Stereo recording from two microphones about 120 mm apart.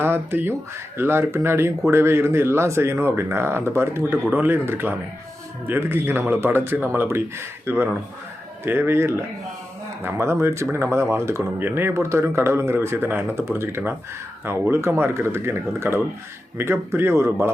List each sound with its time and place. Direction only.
0.0 s speech: 20° right (ahead or behind)